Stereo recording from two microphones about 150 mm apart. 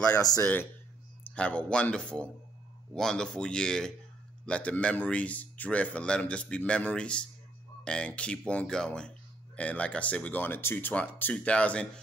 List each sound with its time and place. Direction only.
0.2 s speech: 25° left (ahead or behind)
1.3 s speech: 10° left (ahead or behind)